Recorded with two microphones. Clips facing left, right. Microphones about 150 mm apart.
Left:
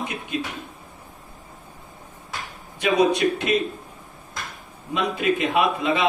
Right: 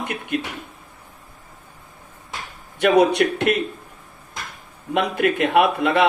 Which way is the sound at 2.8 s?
65° right (ahead or behind).